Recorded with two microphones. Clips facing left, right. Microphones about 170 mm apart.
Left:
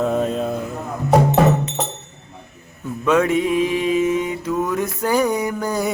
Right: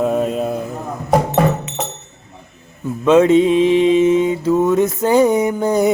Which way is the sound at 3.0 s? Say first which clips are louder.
Right 6 dB; 25° right (ahead or behind).